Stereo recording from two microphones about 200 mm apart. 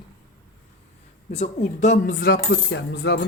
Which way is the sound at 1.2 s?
35° left (ahead or behind).